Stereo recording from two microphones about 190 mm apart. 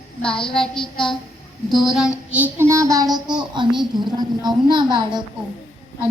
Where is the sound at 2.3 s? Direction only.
10° right (ahead or behind).